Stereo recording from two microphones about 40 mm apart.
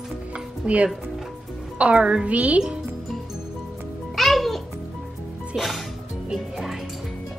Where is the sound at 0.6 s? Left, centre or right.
Right.